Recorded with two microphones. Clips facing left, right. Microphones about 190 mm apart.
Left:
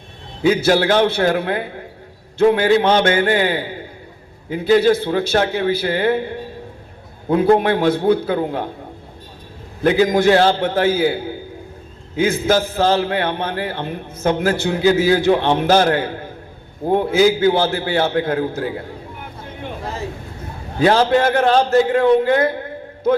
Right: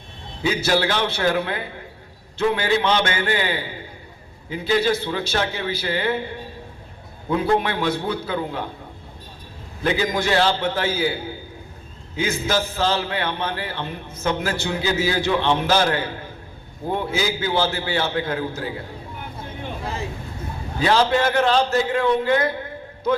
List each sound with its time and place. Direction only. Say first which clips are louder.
0.4 s a man's voice: left 6 dB; 55° left (ahead or behind)
9.8 s a man's voice: left 8 dB; 50° left (ahead or behind)
20.7 s a man's voice: left 5 dB; 50° left (ahead or behind)